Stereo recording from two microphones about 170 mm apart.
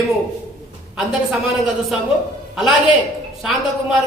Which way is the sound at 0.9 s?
Centre (ahead or behind).